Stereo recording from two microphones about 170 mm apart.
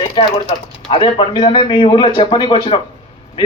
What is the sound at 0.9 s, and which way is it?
A man's voice, 30° left (ahead or behind).